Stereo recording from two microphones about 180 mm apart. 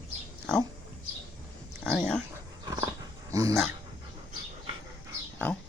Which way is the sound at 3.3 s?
20° right (ahead or behind).